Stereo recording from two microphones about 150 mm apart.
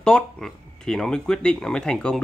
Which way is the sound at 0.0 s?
5° left (ahead or behind).